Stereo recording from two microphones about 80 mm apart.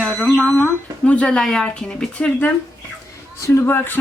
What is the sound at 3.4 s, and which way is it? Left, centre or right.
Speech, left.